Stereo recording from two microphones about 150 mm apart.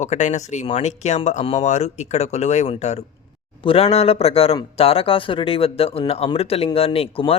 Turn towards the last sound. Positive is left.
turn(degrees=40)  # may be behind; listen again after turning